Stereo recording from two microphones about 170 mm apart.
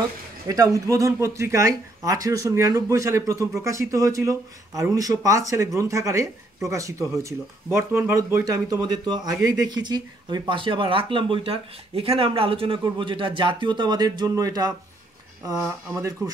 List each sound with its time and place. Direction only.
0.5 s speech: 20° right (ahead or behind)
15.9 s speech: 20° right (ahead or behind)